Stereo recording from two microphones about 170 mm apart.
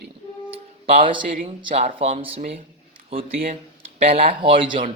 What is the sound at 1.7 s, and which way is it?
Speech, 40° right (ahead or behind).